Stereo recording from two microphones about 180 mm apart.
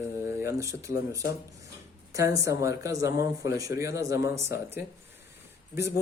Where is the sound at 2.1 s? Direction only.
20° right (ahead or behind).